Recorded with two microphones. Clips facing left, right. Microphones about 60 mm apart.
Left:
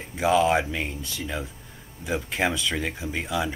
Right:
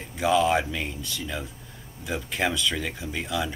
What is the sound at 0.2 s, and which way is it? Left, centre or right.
Speech, centre.